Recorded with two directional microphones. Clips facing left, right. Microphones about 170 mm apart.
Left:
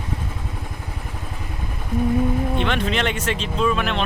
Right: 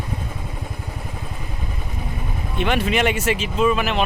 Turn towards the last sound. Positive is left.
turn(degrees=-5)  # may be behind; listen again after turning